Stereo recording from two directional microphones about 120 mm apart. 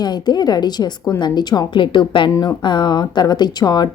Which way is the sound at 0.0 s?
35° left (ahead or behind).